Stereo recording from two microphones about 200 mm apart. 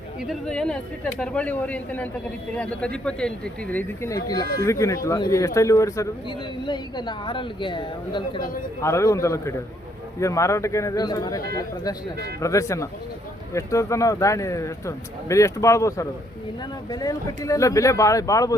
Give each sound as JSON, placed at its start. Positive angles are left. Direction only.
{"t": 0.2, "sound": "speech", "side_deg": 0}